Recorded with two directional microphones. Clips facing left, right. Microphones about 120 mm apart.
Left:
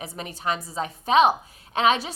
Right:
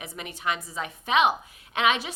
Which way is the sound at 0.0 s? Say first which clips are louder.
Left 2 dB; 35° left (ahead or behind).